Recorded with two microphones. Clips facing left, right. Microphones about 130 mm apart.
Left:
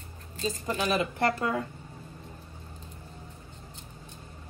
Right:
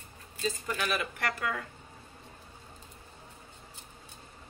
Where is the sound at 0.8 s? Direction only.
25° left (ahead or behind).